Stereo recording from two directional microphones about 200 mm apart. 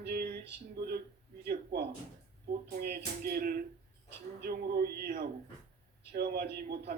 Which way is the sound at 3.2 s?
50° right (ahead or behind).